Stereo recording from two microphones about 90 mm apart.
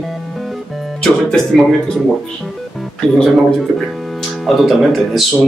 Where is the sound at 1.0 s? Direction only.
5° left (ahead or behind).